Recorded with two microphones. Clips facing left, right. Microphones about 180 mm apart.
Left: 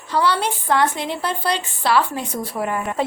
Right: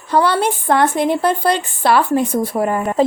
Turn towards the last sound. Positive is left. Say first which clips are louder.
# right 6 dB
turn(degrees=-40)  # may be behind; listen again after turning